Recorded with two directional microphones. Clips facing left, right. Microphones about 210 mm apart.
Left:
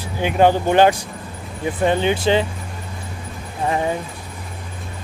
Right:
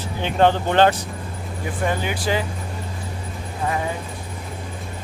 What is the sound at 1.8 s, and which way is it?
Speech, 25° left (ahead or behind).